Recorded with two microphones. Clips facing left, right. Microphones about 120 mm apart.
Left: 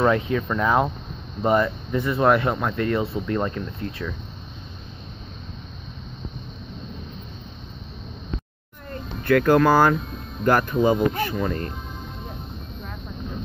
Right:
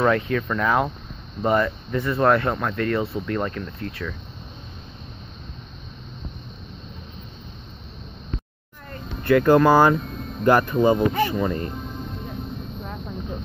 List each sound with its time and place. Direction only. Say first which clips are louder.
0.0 s speech: even; 15° left (ahead or behind)
9.2 s speech: right 1 dB; 5° right (ahead or behind)